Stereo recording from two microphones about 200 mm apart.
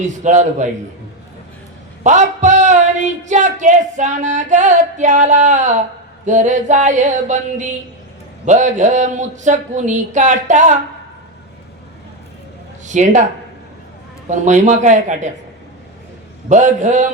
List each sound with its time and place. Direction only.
0.0 s speech: 35° right (ahead or behind)
2.0 s speech: 35° right (ahead or behind)
12.8 s speech: 35° right (ahead or behind)
14.3 s speech: 35° right (ahead or behind)
16.5 s speech: 35° right (ahead or behind)